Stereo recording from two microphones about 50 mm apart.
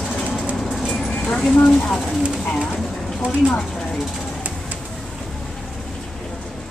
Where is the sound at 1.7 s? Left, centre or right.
Centre.